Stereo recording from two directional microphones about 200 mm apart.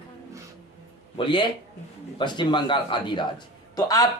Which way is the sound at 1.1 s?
25° left (ahead or behind).